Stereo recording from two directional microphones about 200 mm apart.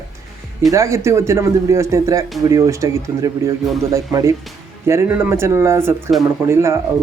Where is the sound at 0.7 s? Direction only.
15° right (ahead or behind).